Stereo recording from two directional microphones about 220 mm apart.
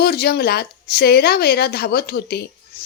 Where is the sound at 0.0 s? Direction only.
45° left (ahead or behind).